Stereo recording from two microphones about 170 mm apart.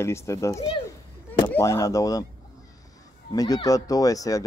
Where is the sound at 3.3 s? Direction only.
20° left (ahead or behind).